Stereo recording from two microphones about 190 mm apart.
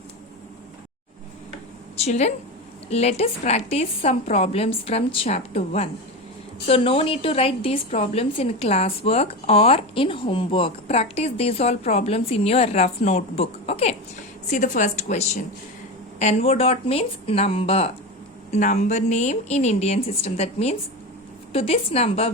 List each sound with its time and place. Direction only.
2.0 s a woman's voice: 35° left (ahead or behind)